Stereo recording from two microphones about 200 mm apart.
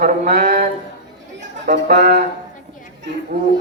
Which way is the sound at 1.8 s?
55° right (ahead or behind).